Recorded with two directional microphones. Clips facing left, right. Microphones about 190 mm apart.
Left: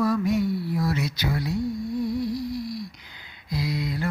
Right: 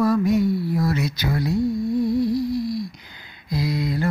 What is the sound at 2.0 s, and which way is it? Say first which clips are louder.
Humming: right 6 dB; 25° right (ahead or behind).